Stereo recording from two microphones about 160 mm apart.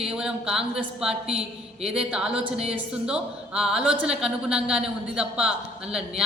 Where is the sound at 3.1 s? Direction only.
5° right (ahead or behind).